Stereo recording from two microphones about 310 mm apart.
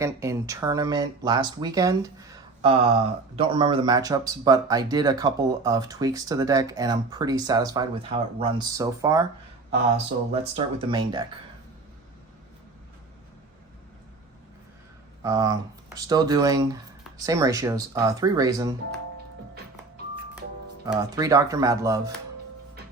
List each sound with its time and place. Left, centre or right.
0.0 s speech: centre
10.3 s speech: centre
15.2 s speech: centre
20.8 s speech: centre